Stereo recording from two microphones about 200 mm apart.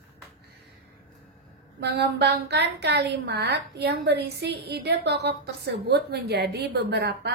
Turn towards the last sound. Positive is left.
turn(degrees=-55)  # may be behind; listen again after turning